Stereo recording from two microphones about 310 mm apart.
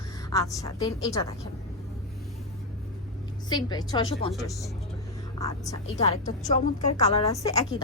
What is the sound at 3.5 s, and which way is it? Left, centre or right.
Speech, centre.